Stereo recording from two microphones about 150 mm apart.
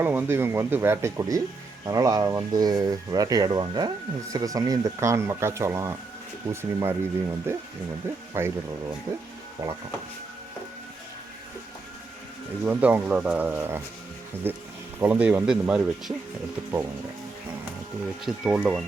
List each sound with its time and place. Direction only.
0.0 s speech: 15° right (ahead or behind)
9.6 s speech: 25° right (ahead or behind)
12.6 s speech: 10° right (ahead or behind)
18.3 s speech: 10° right (ahead or behind)